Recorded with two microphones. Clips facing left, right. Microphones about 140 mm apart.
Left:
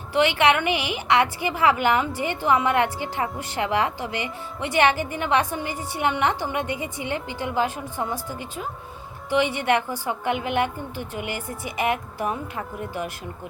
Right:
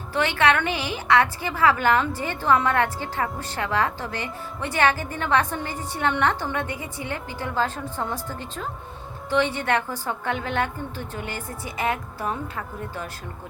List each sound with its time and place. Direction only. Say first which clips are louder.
0.1 s a woman's voice: left 2 dB; 15° left (ahead or behind)